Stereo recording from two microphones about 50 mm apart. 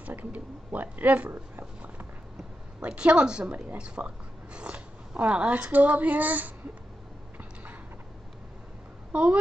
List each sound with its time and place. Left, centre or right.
0.0 s speech: right
2.8 s a woman's voice: right
9.1 s speech: right